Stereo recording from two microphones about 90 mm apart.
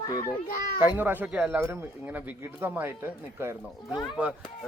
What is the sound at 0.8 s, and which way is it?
Speech, 20° right (ahead or behind).